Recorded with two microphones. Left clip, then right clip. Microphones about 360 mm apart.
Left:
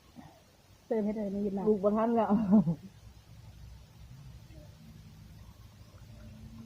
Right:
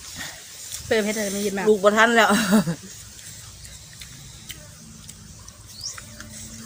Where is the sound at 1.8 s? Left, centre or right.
Left.